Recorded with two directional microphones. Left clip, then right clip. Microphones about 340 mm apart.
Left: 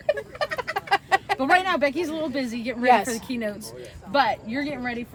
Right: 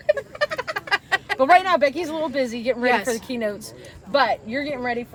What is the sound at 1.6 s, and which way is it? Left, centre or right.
A woman's voice, centre.